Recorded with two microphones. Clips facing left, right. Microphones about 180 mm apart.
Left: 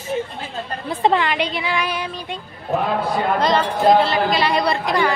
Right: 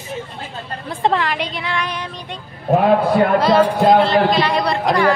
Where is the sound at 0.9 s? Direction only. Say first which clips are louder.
Even; 5° left (ahead or behind).